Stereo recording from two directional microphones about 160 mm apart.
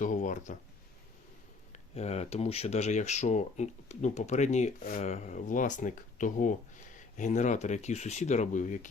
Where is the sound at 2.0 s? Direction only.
40° left (ahead or behind).